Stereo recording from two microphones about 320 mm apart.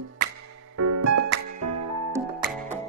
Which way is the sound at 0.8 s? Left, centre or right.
Right.